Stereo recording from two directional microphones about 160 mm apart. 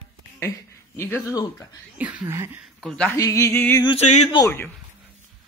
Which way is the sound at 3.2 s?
20° left (ahead or behind).